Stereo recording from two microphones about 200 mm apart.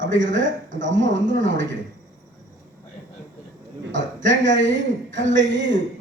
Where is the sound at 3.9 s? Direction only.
65° right (ahead or behind).